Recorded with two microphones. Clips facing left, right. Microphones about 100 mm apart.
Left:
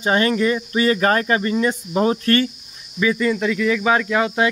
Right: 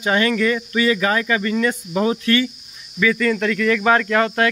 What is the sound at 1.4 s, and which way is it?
Speech, 25° left (ahead or behind).